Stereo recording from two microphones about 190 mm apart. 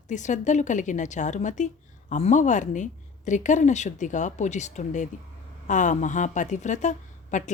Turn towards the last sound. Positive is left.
turn(degrees=40)  # may be behind; listen again after turning